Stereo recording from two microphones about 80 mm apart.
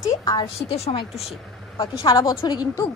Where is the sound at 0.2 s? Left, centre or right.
Left.